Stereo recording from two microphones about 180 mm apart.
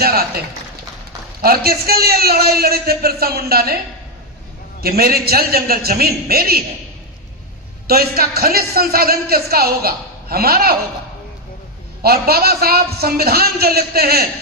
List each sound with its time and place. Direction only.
0.0 s a man's voice: 60° right (ahead or behind)
1.4 s a man's voice: 55° right (ahead or behind)
4.8 s a man's voice: 60° right (ahead or behind)
7.9 s a man's voice: 55° right (ahead or behind)
12.0 s a man's voice: 60° right (ahead or behind)